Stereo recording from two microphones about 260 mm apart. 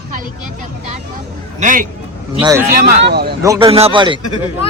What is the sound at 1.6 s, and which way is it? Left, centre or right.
A man's voice, right.